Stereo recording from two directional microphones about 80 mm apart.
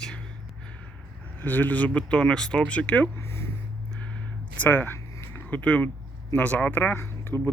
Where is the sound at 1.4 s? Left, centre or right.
Left.